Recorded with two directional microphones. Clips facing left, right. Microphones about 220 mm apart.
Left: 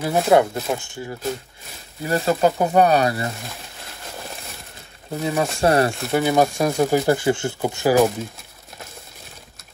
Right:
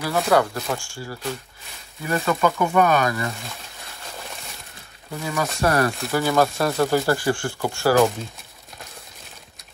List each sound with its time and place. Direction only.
0.0 s speech: 25° left (ahead or behind)
2.0 s speech: 30° left (ahead or behind)
4.2 s a sound: centre (ahead or behind)
5.1 s speech: 30° left (ahead or behind)
6.1 s speech: 15° left (ahead or behind)